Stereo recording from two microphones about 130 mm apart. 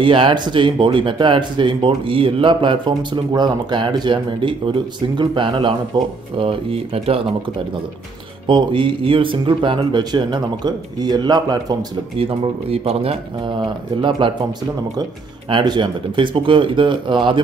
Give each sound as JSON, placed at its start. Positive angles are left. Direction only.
{"t": 0.0, "sound": "speech", "side_deg": -40}
{"t": 8.5, "sound": "speech", "side_deg": -40}
{"t": 12.2, "sound": "speech", "side_deg": -45}
{"t": 15.5, "sound": "speech", "side_deg": -35}